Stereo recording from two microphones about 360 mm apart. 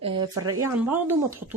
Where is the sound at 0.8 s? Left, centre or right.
Centre.